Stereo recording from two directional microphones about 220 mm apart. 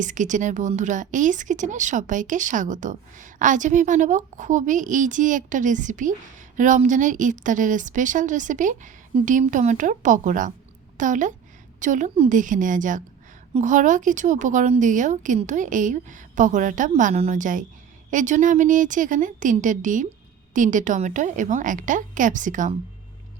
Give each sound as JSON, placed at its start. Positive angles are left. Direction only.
{"t": 0.0, "sound": "a woman's voice", "side_deg": -35}